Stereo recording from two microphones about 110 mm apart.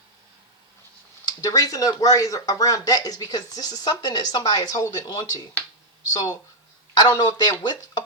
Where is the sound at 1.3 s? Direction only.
35° left (ahead or behind).